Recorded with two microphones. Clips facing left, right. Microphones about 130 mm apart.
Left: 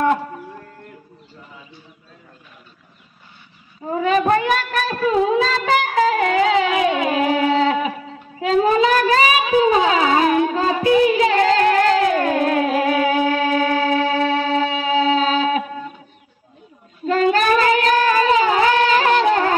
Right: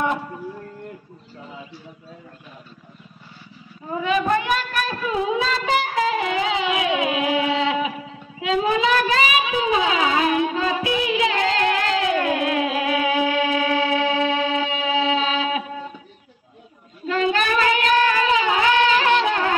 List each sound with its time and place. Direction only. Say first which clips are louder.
4.3 s child singing: left 4 dB; 40° left (ahead or behind)
6.0 s a sound: left 5 dB; 45° left (ahead or behind)
8.4 s child singing: left 5 dB; 40° left (ahead or behind)
17.0 s child singing: left 5 dB; 40° left (ahead or behind)